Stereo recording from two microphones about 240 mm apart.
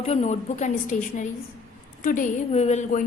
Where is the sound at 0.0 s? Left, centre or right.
Left.